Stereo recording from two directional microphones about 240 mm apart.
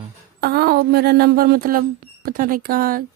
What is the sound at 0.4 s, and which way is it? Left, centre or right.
Speech, right.